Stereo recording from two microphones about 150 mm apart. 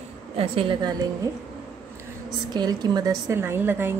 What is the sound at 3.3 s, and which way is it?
Speech, 15° right (ahead or behind).